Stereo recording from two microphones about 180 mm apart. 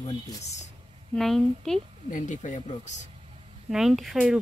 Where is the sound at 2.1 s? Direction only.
45° left (ahead or behind).